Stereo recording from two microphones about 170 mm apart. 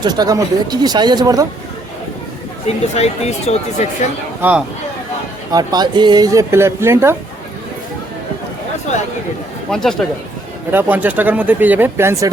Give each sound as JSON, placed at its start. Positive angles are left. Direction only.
{"t": 0.0, "sound": "speech", "side_deg": -25}
{"t": 2.8, "sound": "speech", "side_deg": 40}
{"t": 4.4, "sound": "speech", "side_deg": -10}
{"t": 5.5, "sound": "speech", "side_deg": -25}
{"t": 9.6, "sound": "speech", "side_deg": 5}
{"t": 10.7, "sound": "speech", "side_deg": -10}